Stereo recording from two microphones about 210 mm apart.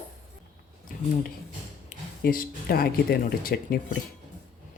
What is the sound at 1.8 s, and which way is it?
Speech, 40° left (ahead or behind).